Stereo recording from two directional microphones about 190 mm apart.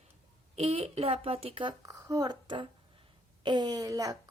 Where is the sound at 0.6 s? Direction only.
30° right (ahead or behind).